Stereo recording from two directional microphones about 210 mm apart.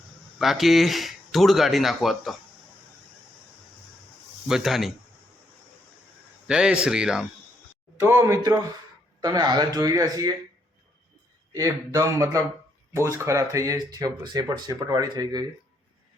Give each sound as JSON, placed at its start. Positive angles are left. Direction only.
{"t": 0.3, "sound": "speech", "side_deg": 0}
{"t": 4.4, "sound": "speech", "side_deg": 0}
{"t": 6.5, "sound": "speech", "side_deg": -5}
{"t": 11.5, "sound": "speech", "side_deg": -15}